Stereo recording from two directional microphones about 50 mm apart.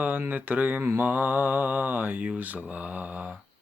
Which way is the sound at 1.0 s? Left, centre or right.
Right.